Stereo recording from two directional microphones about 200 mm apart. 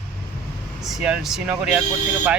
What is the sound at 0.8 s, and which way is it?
Speech, 5° right (ahead or behind).